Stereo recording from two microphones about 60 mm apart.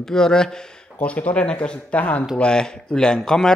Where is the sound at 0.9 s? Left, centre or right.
Left.